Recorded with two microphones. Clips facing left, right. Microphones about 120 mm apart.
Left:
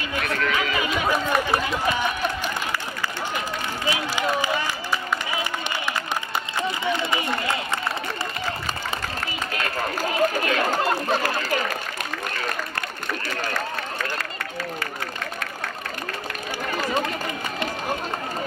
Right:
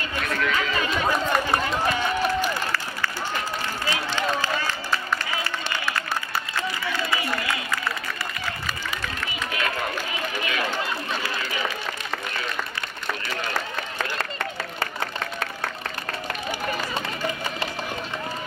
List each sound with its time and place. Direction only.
0.5 s chatter: 15° left (ahead or behind)
3.8 s run: 15° left (ahead or behind)
6.8 s run: 20° left (ahead or behind)
8.6 s run: 40° left (ahead or behind)